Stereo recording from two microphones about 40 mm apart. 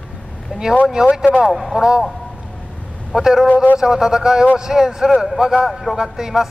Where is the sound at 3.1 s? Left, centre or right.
Centre.